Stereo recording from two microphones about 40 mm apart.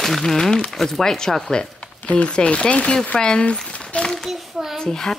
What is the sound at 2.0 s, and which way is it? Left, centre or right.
Speech, left.